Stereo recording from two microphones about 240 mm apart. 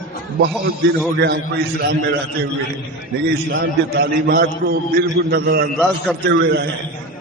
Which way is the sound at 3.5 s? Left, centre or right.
Right.